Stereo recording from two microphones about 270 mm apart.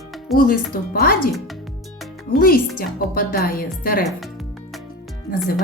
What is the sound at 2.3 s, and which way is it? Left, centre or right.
Speech, left.